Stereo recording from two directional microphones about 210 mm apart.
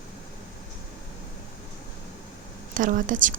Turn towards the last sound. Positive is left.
turn(degrees=-40)  # may be behind; listen again after turning